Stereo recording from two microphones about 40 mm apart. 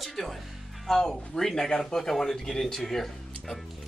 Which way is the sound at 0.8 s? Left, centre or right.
Centre.